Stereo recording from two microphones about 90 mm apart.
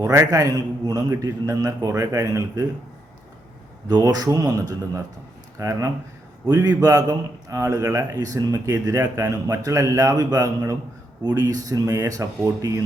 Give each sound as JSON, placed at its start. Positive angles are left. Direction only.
{"t": 0.0, "sound": "a man's voice", "side_deg": -30}
{"t": 0.3, "sound": "a man's voice", "side_deg": -45}
{"t": 3.8, "sound": "a man's voice", "side_deg": -50}
{"t": 6.4, "sound": "a man's voice", "side_deg": -45}